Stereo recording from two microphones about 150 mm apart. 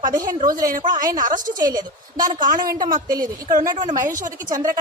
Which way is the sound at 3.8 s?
55° right (ahead or behind).